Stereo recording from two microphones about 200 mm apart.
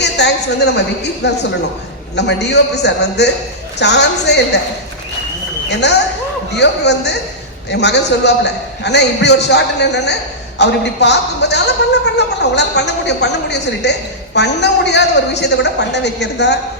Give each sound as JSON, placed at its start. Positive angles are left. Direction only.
{"t": 0.0, "sound": "a sound", "side_deg": 55}
{"t": 1.2, "sound": "a man's voice", "side_deg": 55}
{"t": 5.6, "sound": "a man's voice", "side_deg": 60}